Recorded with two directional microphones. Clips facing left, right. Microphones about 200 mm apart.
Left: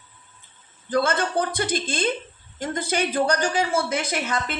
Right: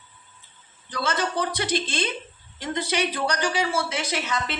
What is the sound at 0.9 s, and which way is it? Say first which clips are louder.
A woman's voice: left 5 dB; 55° left (ahead or behind).